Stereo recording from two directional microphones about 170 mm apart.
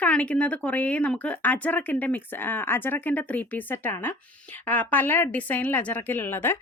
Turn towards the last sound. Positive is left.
turn(degrees=15)  # may be behind; listen again after turning